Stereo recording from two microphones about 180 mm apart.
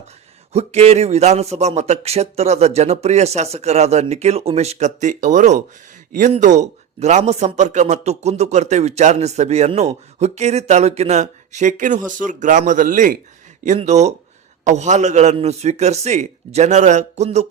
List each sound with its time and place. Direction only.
0.5 s a man's voice: 35° right (ahead or behind)